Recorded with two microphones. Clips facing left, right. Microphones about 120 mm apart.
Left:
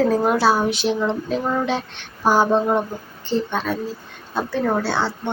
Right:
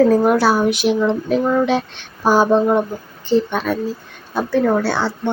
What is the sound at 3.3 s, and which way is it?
Speech, 75° right (ahead or behind).